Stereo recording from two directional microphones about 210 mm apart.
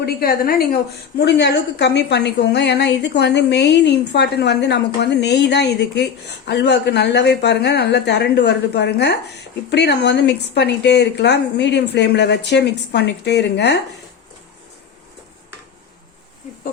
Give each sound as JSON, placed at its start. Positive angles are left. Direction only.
{"t": 0.0, "sound": "a woman's voice", "side_deg": 45}